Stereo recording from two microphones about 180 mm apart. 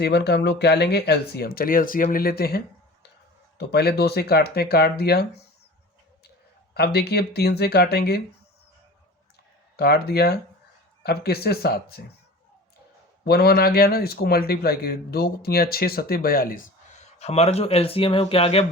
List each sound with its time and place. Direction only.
0.0 s a man's voice: 70° left (ahead or behind)
3.6 s a man's voice: 65° left (ahead or behind)
6.7 s a man's voice: 60° left (ahead or behind)
9.7 s a man's voice: 60° left (ahead or behind)
13.2 s a man's voice: 60° left (ahead or behind); by 18.6 s 35° left (ahead or behind)